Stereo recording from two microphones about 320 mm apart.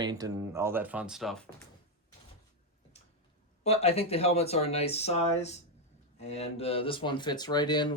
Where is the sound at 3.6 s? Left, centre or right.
Centre.